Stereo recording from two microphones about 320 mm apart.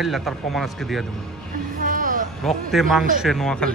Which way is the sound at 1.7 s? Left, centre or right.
Right.